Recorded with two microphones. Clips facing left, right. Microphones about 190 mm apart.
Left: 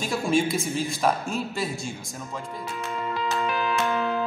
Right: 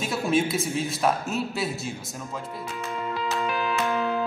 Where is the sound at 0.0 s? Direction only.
Centre (ahead or behind).